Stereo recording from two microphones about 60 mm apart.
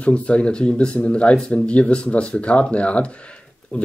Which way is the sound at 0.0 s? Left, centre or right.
Centre.